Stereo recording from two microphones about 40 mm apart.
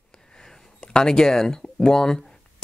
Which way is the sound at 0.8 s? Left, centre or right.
Centre.